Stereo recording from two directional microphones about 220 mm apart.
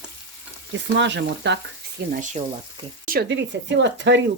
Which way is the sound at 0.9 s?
55° right (ahead or behind).